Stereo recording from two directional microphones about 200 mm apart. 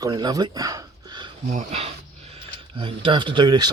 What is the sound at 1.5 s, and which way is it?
Speech, 35° right (ahead or behind).